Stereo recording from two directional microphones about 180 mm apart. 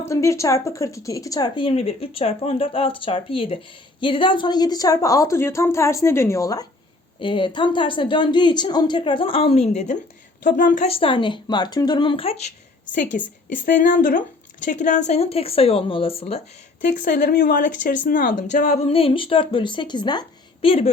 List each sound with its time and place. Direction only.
0.0 s speech: 15° left (ahead or behind); by 12.5 s 35° left (ahead or behind)
12.9 s a woman's voice: 45° left (ahead or behind)
16.8 s speech: 50° left (ahead or behind); by 20.9 s 30° left (ahead or behind)